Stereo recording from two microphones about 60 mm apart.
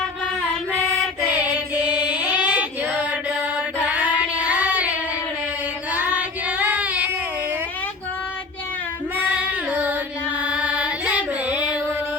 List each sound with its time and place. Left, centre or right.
1.3 s female singing: right
5.9 s child singing: right
9.1 s singing: right
10.4 s carnatic music: right